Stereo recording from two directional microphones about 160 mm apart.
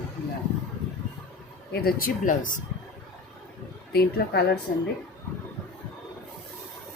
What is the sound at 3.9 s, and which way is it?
Speech, 85° left.